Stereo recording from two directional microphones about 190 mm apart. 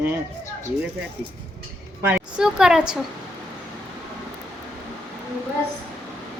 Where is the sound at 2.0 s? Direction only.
10° right (ahead or behind).